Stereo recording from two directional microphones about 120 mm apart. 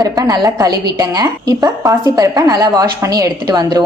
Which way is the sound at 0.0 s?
30° right (ahead or behind).